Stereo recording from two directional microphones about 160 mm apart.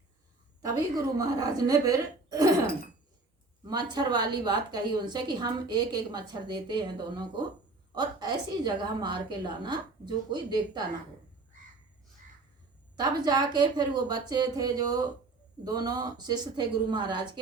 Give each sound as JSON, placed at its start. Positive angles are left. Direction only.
{"t": 0.6, "sound": "a woman's voice", "side_deg": -25}
{"t": 3.7, "sound": "a woman's voice", "side_deg": -25}
{"t": 13.0, "sound": "a woman's voice", "side_deg": -25}